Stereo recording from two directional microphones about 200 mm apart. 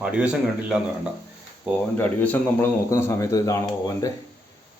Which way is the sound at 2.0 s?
10° left (ahead or behind).